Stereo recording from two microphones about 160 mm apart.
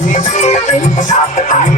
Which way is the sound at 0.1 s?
45° left (ahead or behind).